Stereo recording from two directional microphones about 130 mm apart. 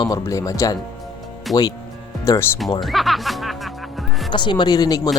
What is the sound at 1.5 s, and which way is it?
Speech, centre (ahead or behind).